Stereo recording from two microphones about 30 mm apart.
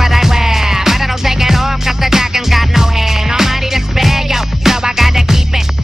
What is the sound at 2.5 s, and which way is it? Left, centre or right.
Music, centre.